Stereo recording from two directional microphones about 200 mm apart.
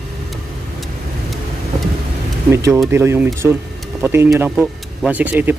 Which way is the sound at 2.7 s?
10° right (ahead or behind).